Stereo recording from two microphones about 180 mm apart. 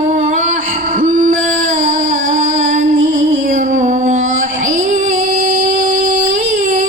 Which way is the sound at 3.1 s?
45° right (ahead or behind).